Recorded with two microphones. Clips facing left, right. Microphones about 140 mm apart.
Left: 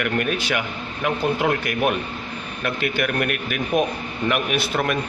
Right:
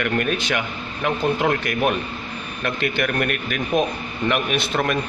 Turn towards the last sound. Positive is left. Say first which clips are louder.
# even
turn(degrees=5)  # may be behind; listen again after turning